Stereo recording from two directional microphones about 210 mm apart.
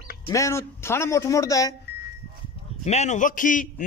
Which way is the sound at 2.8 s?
30° left (ahead or behind).